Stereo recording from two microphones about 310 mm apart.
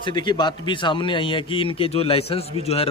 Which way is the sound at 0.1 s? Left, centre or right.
Centre.